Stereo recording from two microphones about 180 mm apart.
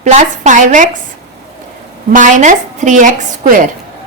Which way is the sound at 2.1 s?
45° right (ahead or behind).